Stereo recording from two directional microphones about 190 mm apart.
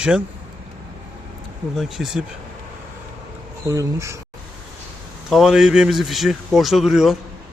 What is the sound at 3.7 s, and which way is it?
Speech, 15° right (ahead or behind).